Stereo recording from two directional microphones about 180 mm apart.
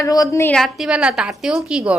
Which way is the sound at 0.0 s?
20° left (ahead or behind).